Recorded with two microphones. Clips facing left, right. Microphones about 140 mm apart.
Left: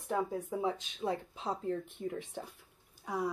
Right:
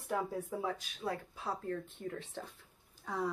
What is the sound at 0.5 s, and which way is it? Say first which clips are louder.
Speech: left 3 dB; 20° left (ahead or behind).